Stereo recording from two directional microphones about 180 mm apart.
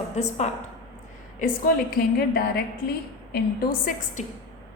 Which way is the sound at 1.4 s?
55° left (ahead or behind).